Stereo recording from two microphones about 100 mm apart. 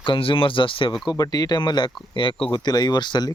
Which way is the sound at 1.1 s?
40° left (ahead or behind).